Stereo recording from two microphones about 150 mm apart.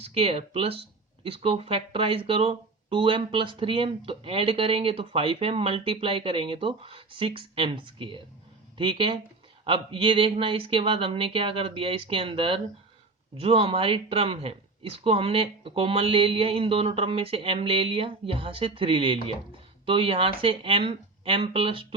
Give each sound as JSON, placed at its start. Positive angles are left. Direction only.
{"t": 0.0, "sound": "speech", "side_deg": -40}